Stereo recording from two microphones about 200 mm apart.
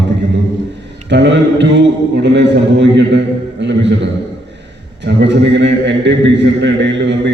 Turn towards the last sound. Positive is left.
turn(degrees=-60)  # may be behind; listen again after turning